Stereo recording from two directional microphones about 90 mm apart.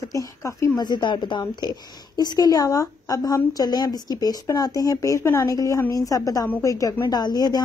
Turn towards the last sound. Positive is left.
turn(degrees=50)  # may be behind; listen again after turning